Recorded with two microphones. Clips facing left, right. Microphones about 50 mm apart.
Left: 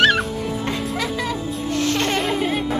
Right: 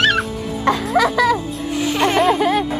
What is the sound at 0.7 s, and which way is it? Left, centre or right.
Music, right.